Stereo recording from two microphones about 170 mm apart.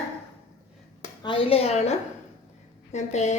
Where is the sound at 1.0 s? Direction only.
30° left (ahead or behind).